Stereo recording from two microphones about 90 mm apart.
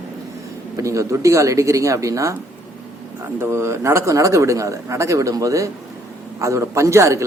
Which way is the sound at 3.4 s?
30° right (ahead or behind).